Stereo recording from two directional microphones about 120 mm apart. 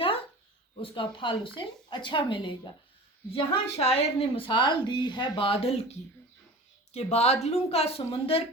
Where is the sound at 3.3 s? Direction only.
55° left (ahead or behind).